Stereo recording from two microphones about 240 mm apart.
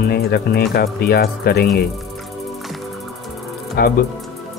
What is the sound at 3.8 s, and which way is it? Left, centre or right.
Speech, left.